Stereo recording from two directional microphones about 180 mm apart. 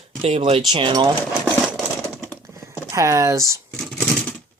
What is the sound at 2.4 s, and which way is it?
Typing, 15° right (ahead or behind).